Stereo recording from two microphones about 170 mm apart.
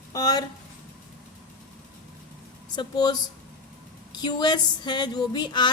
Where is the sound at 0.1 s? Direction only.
20° left (ahead or behind).